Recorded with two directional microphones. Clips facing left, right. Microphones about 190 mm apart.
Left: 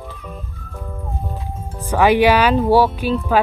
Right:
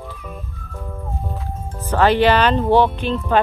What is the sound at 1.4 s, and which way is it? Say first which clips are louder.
Speech: even; 10° left (ahead or behind).